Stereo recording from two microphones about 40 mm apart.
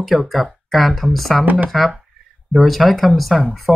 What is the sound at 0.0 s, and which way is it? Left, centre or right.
Speech, centre.